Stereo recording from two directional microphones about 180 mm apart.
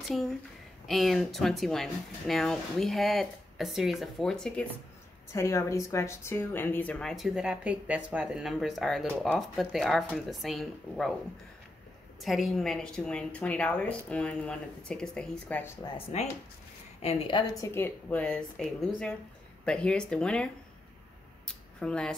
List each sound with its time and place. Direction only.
0.0 s a woman's voice: centre (ahead or behind)
5.3 s speech: 15° left (ahead or behind); by 11.1 s centre (ahead or behind)
12.2 s speech: centre (ahead or behind)
17.0 s a woman's voice: 35° left (ahead or behind)
17.4 s a woman's voice: 15° left (ahead or behind)
21.5 s speech: 5° left (ahead or behind)